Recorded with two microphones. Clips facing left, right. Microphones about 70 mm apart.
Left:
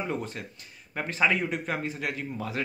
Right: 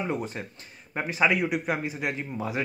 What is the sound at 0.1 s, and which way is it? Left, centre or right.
Speech, right.